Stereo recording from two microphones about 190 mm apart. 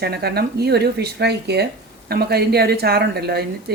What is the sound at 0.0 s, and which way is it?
A woman's voice, 55° right (ahead or behind).